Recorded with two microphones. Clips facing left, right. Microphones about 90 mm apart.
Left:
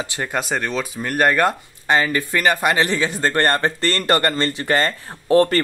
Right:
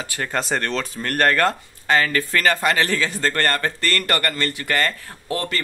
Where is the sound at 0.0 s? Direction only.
20° left (ahead or behind).